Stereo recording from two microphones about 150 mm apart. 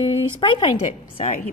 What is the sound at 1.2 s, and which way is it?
Speech, 50° left (ahead or behind).